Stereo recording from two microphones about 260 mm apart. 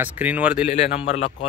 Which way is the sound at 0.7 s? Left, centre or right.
Left.